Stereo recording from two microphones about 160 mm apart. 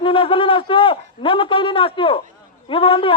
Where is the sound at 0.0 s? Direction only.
35° left (ahead or behind).